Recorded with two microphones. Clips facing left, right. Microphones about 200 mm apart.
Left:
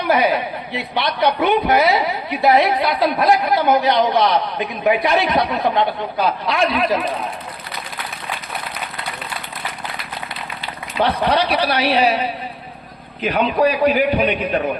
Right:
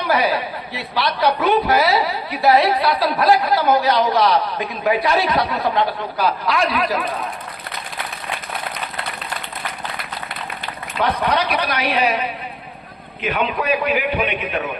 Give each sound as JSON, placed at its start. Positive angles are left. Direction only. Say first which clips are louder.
{"t": 0.1, "sound": "speech", "louder": "left 2 dB", "side_deg": 20}
{"t": 10.9, "sound": "a man's voice", "louder": "left 2 dB", "side_deg": 30}